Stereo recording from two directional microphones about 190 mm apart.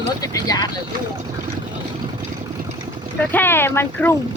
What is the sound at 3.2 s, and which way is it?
Speech, 10° left (ahead or behind).